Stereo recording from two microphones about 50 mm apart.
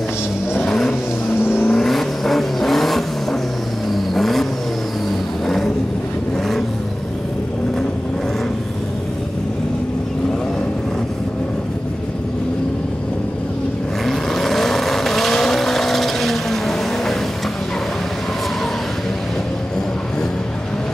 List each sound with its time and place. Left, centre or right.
0.7 s vehicle: centre
1.4 s vehicle: left
1.7 s vehicle: centre
14.0 s vehicle: centre